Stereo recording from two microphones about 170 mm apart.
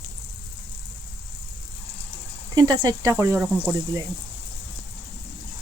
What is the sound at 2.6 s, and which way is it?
Speech, 25° right (ahead or behind).